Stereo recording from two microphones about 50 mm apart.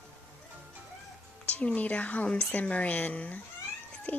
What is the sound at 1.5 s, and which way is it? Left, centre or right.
A woman's voice, left.